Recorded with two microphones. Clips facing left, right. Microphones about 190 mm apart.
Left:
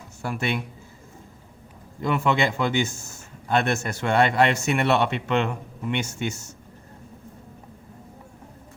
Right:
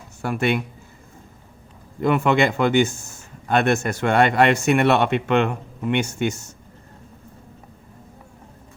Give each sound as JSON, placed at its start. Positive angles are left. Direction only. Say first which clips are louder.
{"t": 0.2, "sound": "speech", "louder": "right 6 dB", "side_deg": -55}
{"t": 2.0, "sound": "speech", "louder": "right 5 dB", "side_deg": -55}